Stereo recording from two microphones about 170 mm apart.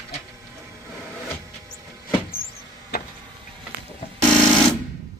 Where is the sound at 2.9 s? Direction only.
65° left (ahead or behind).